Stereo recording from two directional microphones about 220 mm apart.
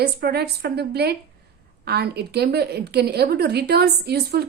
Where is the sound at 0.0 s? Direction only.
45° right (ahead or behind).